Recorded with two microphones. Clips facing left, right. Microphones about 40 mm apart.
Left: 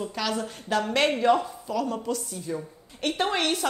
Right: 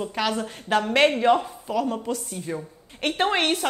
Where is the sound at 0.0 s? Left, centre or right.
Right.